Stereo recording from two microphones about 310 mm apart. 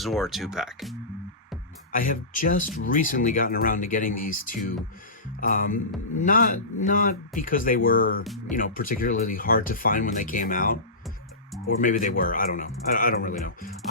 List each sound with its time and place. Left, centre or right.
0.0 s speech: centre
1.9 s speech: left